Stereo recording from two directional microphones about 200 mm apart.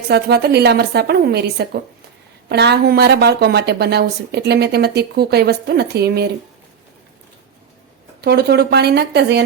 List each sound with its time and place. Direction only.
0.1 s a woman's voice: 55° right (ahead or behind)
8.2 s a woman's voice: 55° right (ahead or behind)